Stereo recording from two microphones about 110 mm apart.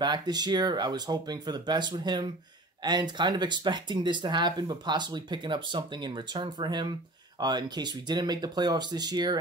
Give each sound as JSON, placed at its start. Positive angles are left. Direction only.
{"t": 0.0, "sound": "speech", "side_deg": -40}